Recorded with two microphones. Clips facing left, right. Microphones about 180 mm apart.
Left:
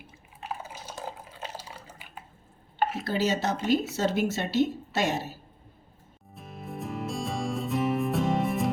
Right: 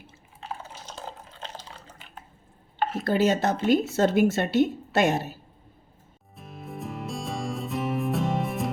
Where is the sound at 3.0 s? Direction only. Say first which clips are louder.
Right 7 dB; 55° right (ahead or behind).